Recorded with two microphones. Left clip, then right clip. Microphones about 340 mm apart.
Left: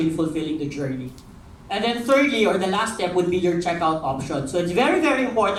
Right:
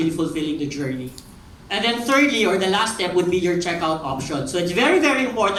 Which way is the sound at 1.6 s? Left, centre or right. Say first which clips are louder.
Right 1 dB; centre.